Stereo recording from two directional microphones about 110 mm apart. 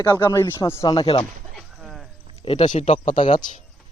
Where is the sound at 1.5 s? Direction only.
Centre (ahead or behind).